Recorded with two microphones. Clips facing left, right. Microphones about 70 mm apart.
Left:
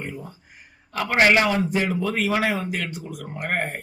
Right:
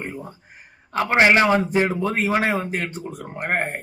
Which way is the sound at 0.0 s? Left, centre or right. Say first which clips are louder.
Right 2 dB; right.